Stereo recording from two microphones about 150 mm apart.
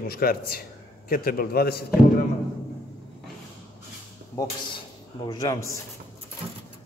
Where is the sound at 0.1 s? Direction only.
85° left.